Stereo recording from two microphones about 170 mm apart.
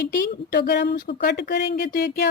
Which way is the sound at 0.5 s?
75° left (ahead or behind).